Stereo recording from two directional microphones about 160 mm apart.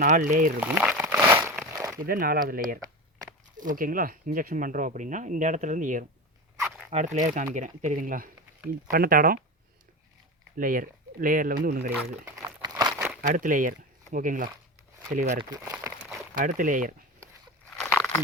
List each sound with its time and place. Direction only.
0.0 s speech: 50° right (ahead or behind)
0.6 s crumpling: 10° right (ahead or behind)
1.5 s a sound: 15° right (ahead or behind)
2.0 s speech: 65° right (ahead or behind)
10.6 s speech: 60° right (ahead or behind)
12.2 s crumpling: 20° right (ahead or behind)
13.2 s speech: 55° right (ahead or behind)
15.4 s speech: 20° right (ahead or behind)
16.3 s speech: 55° right (ahead or behind)
17.7 s crunch: 5° left (ahead or behind)